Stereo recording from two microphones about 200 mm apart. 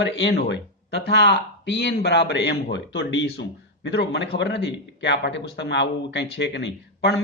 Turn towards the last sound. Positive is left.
turn(degrees=60)  # may be behind; listen again after turning